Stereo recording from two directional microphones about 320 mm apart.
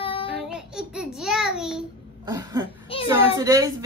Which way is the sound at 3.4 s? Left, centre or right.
Centre.